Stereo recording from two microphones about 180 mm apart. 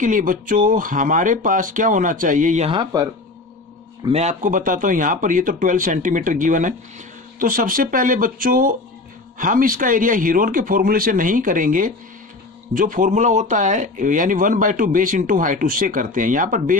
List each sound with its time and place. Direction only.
0.0 s speech: 45° right (ahead or behind)
2.7 s speech: 20° right (ahead or behind)
4.1 s speech: 40° right (ahead or behind)